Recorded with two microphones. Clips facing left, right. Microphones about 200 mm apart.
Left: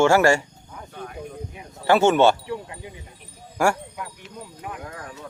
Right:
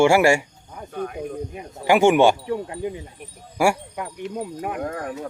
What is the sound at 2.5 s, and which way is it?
Speech, 50° right (ahead or behind).